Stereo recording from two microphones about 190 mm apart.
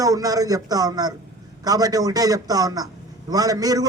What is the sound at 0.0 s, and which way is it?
A man's voice, 20° right (ahead or behind).